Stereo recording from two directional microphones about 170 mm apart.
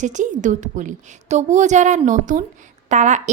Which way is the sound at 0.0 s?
45° right (ahead or behind).